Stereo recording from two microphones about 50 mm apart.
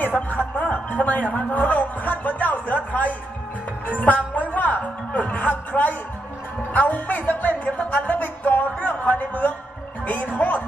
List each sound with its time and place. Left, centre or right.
0.4 s a sound: left
1.3 s a woman's voice: left
6.7 s music: left